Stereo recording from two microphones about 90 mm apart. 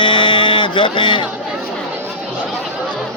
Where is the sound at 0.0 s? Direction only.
70° left (ahead or behind).